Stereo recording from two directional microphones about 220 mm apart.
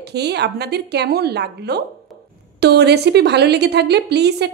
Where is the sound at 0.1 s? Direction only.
50° right (ahead or behind).